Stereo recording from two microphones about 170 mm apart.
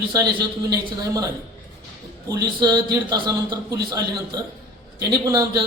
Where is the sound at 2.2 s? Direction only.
20° right (ahead or behind).